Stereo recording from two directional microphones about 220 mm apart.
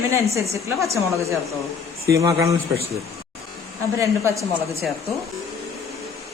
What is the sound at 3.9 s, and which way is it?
Speech, 15° right (ahead or behind).